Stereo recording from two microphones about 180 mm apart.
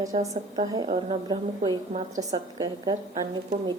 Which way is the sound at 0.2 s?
20° right (ahead or behind).